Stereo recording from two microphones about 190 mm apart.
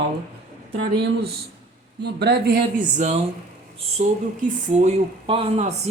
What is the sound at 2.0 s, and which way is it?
Speech, 60° right (ahead or behind).